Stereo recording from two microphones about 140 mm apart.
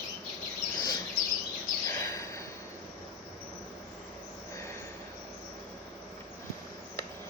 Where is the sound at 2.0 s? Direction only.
20° left (ahead or behind).